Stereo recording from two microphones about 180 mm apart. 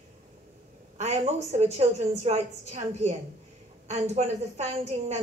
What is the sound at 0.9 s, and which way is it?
A woman's voice, 40° right (ahead or behind).